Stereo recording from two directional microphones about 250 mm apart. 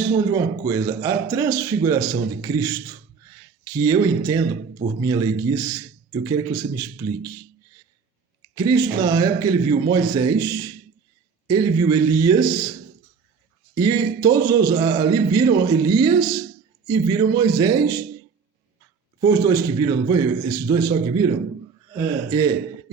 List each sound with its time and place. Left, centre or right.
0.3 s speech: centre
8.5 s speech: centre
13.7 s speech: centre
19.2 s speech: centre